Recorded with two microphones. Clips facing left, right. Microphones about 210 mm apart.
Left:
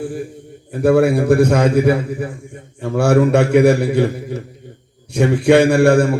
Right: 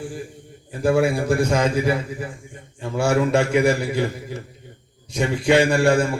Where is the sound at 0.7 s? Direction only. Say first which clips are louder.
Left 6 dB; 60° left (ahead or behind).